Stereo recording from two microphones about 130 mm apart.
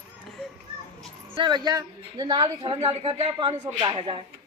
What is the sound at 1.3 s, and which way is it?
A woman's voice, 35° right (ahead or behind).